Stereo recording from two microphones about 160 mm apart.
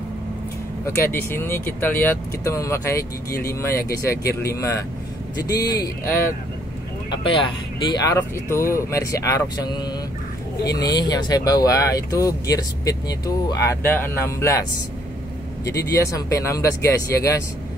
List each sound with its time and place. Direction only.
0.9 s speech: 15° left (ahead or behind)
7.8 s speech: 25° left (ahead or behind)
15.6 s speech: 20° left (ahead or behind)